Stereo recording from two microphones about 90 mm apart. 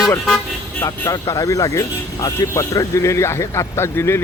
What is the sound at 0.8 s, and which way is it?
Speech, 40° left (ahead or behind).